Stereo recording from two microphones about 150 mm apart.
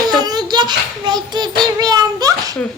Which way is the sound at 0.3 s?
30° right (ahead or behind).